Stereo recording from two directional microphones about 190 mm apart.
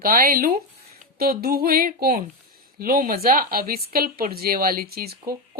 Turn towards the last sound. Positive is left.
turn(degrees=-55)  # may be behind; listen again after turning